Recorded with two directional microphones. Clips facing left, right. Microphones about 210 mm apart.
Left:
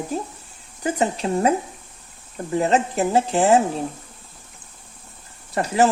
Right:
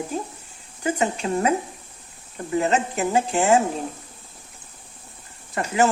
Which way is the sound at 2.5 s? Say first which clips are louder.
Left 2 dB; 35° left (ahead or behind).